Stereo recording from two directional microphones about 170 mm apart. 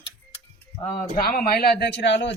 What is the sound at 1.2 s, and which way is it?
A man's voice, 60° left (ahead or behind).